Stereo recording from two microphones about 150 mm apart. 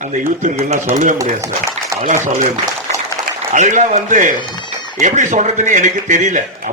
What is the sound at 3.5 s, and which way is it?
A man's voice, 55° right (ahead or behind).